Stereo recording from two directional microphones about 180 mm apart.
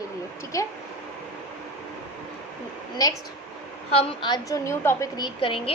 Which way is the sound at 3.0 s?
20° left (ahead or behind).